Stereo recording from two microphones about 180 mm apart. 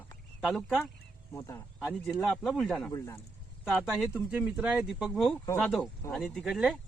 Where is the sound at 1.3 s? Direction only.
15° left (ahead or behind).